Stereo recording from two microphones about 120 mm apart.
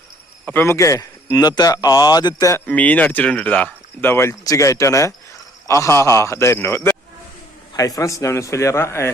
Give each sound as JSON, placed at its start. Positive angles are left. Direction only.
{"t": 0.4, "sound": "speech", "side_deg": 20}
{"t": 2.6, "sound": "a man's voice", "side_deg": 10}